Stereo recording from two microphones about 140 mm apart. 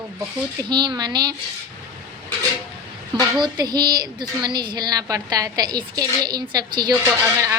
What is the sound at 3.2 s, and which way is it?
A woman's voice, 30° right (ahead or behind).